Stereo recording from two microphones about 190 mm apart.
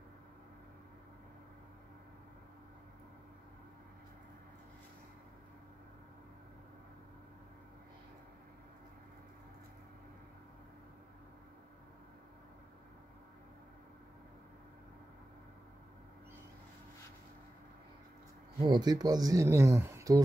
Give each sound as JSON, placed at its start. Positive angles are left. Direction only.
{"t": 18.6, "sound": "speech", "side_deg": -20}